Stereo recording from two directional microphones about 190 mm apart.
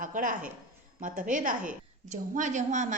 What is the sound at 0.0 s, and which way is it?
A woman's voice, 45° right (ahead or behind).